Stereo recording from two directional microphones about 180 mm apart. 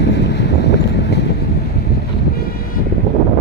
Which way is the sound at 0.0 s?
70° left (ahead or behind).